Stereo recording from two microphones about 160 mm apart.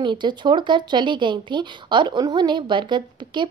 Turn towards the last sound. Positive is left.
turn(degrees=-30)  # may be behind; listen again after turning